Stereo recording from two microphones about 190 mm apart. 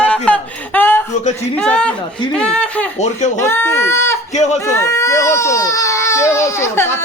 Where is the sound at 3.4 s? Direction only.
10° left (ahead or behind).